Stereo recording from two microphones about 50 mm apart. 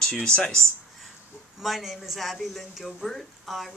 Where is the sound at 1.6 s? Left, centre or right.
Centre.